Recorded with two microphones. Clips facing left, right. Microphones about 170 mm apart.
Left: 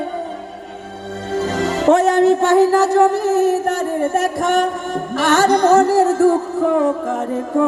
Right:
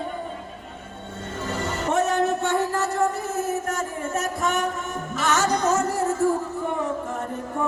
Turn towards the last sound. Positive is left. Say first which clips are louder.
# left 10 dB
turn(degrees=90)